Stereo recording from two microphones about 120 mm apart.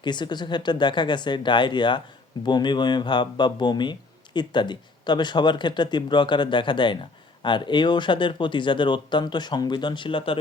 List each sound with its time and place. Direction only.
0.0 s speech: 40° left (ahead or behind)